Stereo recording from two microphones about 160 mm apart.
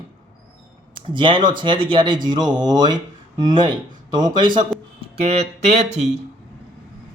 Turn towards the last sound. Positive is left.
turn(degrees=-45)  # may be behind; listen again after turning